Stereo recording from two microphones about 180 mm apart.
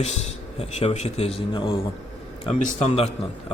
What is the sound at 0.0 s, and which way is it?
Speech, 35° left (ahead or behind).